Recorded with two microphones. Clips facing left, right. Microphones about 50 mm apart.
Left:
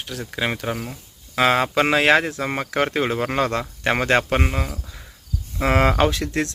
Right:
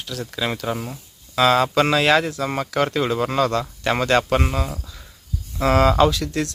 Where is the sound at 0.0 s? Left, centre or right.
Left.